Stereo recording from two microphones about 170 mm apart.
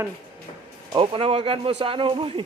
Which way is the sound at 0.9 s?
30° right (ahead or behind).